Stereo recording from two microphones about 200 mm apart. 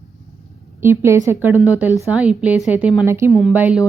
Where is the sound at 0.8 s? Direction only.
10° right (ahead or behind).